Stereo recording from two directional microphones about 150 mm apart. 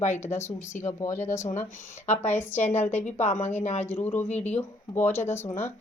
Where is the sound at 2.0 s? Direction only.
45° left (ahead or behind).